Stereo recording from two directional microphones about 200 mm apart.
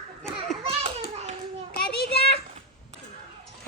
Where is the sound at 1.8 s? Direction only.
50° left (ahead or behind).